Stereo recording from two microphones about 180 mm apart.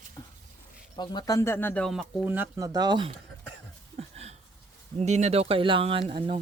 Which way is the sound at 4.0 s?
35° right (ahead or behind).